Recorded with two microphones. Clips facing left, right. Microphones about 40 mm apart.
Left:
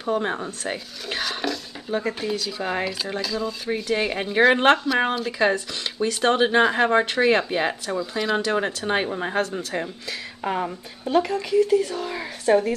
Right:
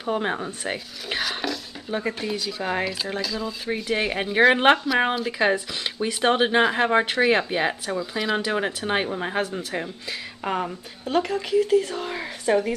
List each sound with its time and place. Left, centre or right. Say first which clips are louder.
0.0 s speech: left 1 dB; centre
11.8 s speech: left 2 dB; right
12.2 s a sound: left 3 dB; centre